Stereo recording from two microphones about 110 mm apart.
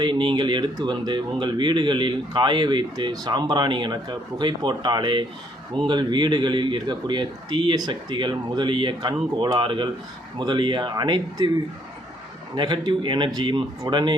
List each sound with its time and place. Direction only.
0.0 s speech: 50° right (ahead or behind)
12.5 s speech: 40° right (ahead or behind)